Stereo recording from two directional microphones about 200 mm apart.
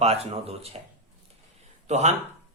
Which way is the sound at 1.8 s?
35° right (ahead or behind).